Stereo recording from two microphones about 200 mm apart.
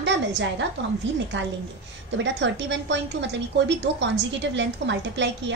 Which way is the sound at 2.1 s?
65° right (ahead or behind).